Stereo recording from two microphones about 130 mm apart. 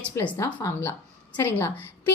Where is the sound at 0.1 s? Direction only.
20° left (ahead or behind).